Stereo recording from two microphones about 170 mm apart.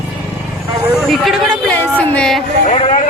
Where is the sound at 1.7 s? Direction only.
10° left (ahead or behind).